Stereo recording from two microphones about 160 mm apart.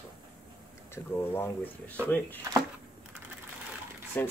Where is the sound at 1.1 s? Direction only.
15° left (ahead or behind).